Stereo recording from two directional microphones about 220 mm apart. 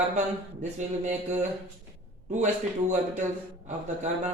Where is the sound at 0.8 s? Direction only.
35° right (ahead or behind).